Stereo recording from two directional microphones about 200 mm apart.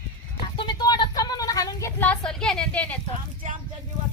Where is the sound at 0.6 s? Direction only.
20° left (ahead or behind); by 3.0 s 5° left (ahead or behind).